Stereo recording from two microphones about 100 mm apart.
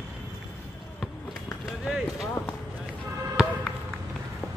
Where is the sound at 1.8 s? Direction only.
5° right (ahead or behind).